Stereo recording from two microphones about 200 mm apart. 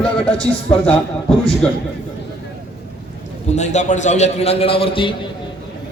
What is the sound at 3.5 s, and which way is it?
A man's voice, 35° left (ahead or behind).